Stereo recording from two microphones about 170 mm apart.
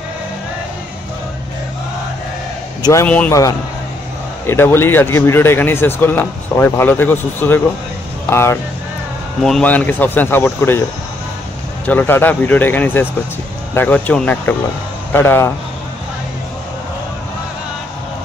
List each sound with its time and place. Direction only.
2.8 s speech: 20° left (ahead or behind)
4.5 s speech: 15° left (ahead or behind)
11.8 s speech: 10° left (ahead or behind)